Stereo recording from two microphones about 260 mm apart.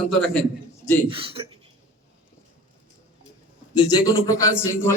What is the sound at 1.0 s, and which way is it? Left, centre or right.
Speech, right.